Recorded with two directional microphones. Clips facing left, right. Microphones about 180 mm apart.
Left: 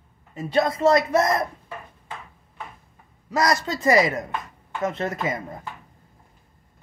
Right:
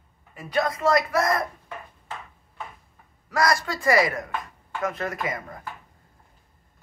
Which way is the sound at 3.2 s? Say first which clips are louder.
Left 1 dB; 20° left (ahead or behind).